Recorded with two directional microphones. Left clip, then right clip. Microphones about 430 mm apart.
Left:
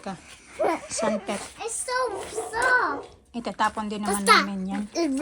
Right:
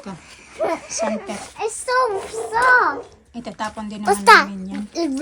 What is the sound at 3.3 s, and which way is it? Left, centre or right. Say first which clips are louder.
Speech: left 3 dB; centre.